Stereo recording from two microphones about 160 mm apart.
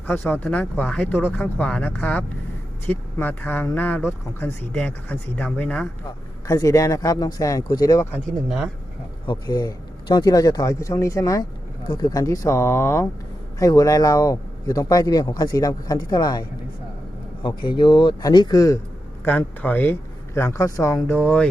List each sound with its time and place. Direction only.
0.1 s speech: 10° left (ahead or behind)
6.5 s speech: 20° left (ahead or behind)
8.4 s speech: centre (ahead or behind)
9.2 s speech: 25° left (ahead or behind)
19.2 s speech: 10° left (ahead or behind)